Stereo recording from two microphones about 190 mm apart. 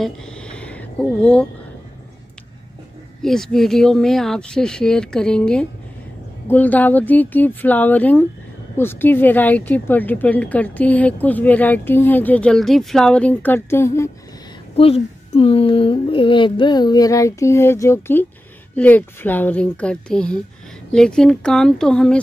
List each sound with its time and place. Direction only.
0.0 s a sound: 5° left (ahead or behind)
3.2 s speech: centre (ahead or behind)
14.8 s speech: 30° left (ahead or behind); by 22.2 s 5° left (ahead or behind)